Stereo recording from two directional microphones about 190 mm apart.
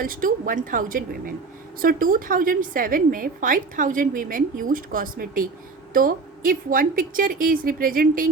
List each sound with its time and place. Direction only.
0.0 s a woman's voice: 45° right (ahead or behind)